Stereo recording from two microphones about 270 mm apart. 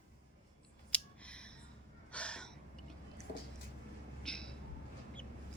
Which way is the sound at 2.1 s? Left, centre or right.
Centre.